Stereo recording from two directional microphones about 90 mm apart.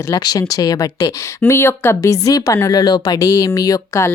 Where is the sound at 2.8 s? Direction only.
50° left (ahead or behind).